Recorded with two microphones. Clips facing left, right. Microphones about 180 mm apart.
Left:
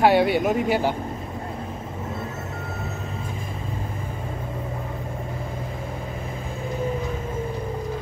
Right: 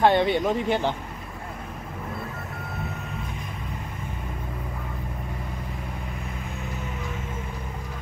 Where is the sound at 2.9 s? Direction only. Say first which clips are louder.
Left 2 dB; 25° left (ahead or behind).